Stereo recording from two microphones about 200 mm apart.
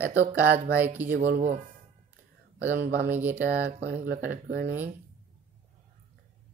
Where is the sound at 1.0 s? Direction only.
45° right (ahead or behind).